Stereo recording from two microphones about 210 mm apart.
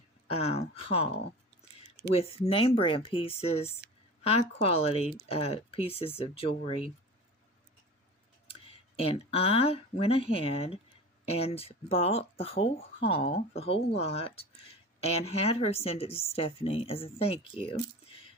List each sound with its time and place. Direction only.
0.3 s speech: 30° left (ahead or behind)
2.1 s a woman's voice: 30° left (ahead or behind)
9.0 s speech: 25° left (ahead or behind)